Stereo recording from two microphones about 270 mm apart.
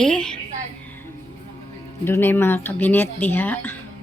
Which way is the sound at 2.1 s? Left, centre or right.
Centre.